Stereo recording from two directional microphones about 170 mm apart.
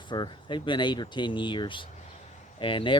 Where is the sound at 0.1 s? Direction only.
30° left (ahead or behind).